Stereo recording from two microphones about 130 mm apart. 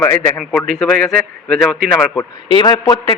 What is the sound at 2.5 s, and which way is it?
Speech, 35° left (ahead or behind).